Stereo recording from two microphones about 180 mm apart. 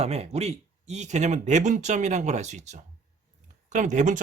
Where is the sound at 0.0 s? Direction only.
35° right (ahead or behind).